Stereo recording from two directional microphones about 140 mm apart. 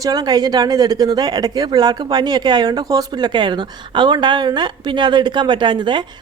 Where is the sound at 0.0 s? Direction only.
30° right (ahead or behind).